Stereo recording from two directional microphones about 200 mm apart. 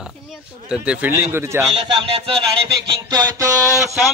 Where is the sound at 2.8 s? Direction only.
20° right (ahead or behind).